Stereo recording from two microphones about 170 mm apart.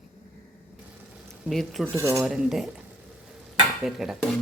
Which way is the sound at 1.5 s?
Centre (ahead or behind).